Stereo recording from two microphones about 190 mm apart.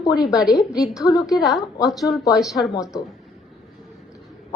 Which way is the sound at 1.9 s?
Centre (ahead or behind).